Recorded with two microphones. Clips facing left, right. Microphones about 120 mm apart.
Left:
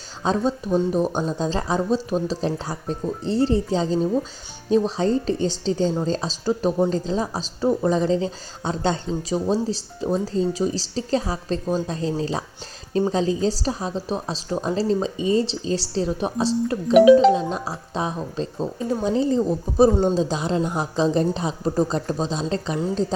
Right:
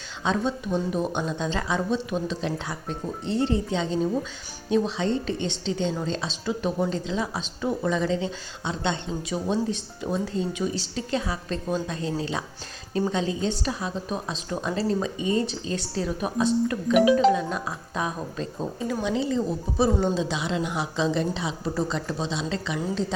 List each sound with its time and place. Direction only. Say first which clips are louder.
0.3 s a woman's voice: left 4 dB; 40° left (ahead or behind)